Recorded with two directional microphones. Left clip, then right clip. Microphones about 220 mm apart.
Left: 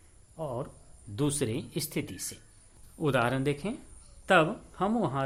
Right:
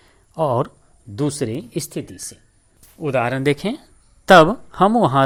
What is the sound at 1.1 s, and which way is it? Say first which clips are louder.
Speech: right 8 dB; 20° right (ahead or behind).